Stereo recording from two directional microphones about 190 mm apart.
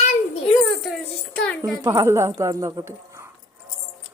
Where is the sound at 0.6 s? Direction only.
Centre (ahead or behind).